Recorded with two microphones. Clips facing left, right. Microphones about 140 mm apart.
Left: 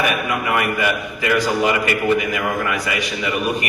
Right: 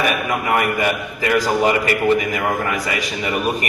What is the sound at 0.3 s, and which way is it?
A man's voice, 35° right (ahead or behind).